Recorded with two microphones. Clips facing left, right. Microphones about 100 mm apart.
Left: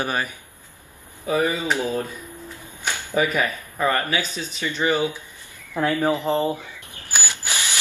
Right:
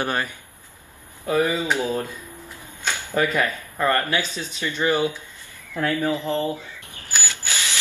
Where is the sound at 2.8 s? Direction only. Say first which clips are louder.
Even; 15° left (ahead or behind).